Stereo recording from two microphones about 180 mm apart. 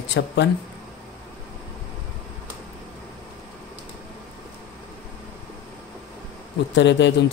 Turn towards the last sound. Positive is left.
turn(degrees=80)